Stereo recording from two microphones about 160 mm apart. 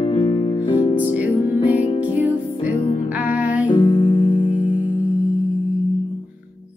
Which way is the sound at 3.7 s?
30° left (ahead or behind).